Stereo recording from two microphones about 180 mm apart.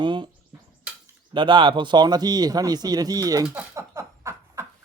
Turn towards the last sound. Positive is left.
turn(degrees=-15)  # may be behind; listen again after turning